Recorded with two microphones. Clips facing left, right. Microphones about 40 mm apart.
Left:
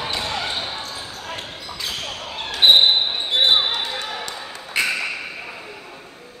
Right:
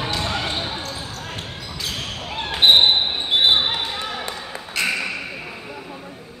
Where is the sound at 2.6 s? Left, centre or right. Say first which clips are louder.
Even; centre.